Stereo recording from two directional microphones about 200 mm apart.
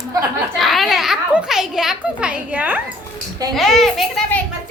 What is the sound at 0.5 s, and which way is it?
A child's voice, centre (ahead or behind).